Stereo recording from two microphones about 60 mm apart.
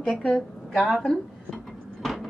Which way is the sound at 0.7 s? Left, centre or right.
Centre.